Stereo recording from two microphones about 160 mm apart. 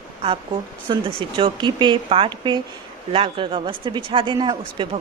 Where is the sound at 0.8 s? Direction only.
30° right (ahead or behind).